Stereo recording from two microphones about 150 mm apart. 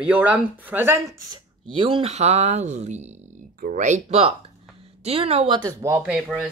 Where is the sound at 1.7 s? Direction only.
35° right (ahead or behind).